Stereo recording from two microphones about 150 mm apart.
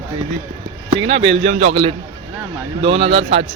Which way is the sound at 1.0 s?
40° right (ahead or behind).